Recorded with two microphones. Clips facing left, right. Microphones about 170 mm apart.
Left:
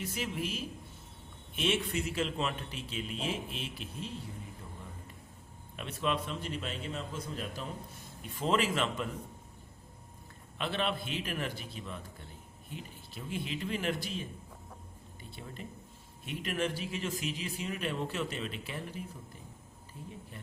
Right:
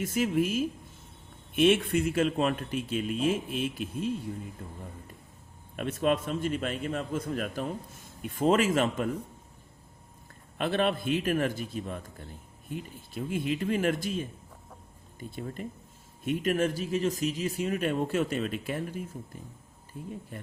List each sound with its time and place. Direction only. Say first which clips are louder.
0.0 s a man's voice: right 10 dB; 50° right (ahead or behind)
5.7 s a man's voice: right 7 dB; 50° right (ahead or behind)
10.6 s a man's voice: right 7 dB; 50° right (ahead or behind)